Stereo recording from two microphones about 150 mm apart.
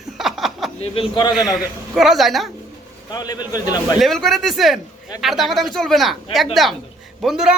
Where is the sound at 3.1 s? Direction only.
25° left (ahead or behind).